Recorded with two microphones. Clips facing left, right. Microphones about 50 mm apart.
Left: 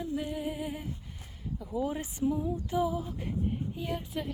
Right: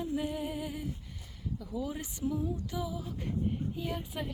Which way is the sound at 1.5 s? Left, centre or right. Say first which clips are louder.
Left 5 dB; left.